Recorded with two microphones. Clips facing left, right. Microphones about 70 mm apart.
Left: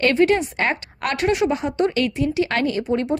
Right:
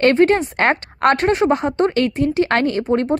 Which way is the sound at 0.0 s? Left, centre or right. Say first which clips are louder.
Right 4 dB; right.